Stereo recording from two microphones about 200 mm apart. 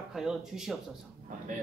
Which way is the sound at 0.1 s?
Centre (ahead or behind).